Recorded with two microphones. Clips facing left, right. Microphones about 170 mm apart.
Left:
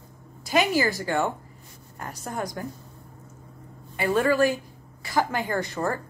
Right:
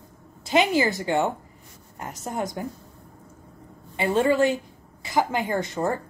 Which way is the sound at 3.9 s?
25° right (ahead or behind).